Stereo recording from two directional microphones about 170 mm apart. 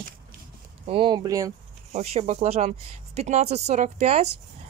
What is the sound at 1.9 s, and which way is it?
Speech, 40° right (ahead or behind).